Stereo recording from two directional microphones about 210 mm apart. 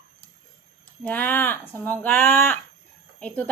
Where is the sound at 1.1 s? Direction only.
10° left (ahead or behind).